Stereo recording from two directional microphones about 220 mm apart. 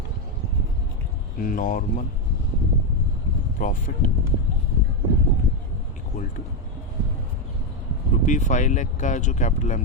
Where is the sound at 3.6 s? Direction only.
35° left (ahead or behind).